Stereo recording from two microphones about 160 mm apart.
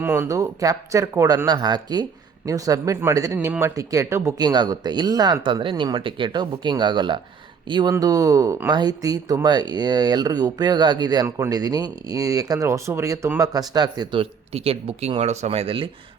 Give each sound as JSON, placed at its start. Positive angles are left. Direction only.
{"t": 0.0, "sound": "speech", "side_deg": -15}